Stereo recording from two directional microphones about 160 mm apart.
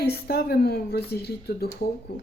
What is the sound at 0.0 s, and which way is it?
Speech, 80° left.